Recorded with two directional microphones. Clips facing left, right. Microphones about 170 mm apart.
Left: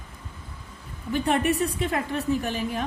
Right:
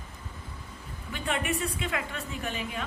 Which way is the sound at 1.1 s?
35° left (ahead or behind).